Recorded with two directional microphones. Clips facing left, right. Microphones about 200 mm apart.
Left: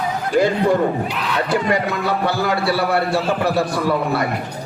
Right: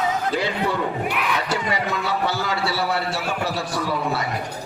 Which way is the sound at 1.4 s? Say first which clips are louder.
Left 6 dB; 55° left (ahead or behind).